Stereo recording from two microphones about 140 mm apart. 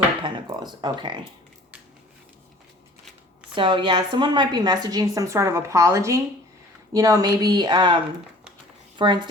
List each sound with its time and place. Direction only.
0.2 s speech: 35° right (ahead or behind)
3.5 s a woman's voice: 35° right (ahead or behind)